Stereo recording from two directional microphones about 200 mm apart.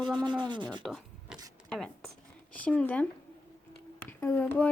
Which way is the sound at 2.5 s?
5° left (ahead or behind).